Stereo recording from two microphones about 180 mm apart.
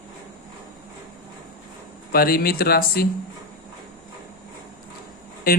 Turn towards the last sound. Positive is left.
turn(degrees=55)  # may be behind; listen again after turning